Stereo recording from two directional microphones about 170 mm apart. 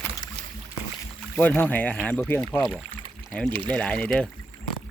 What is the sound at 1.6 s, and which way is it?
Speech, 10° left (ahead or behind).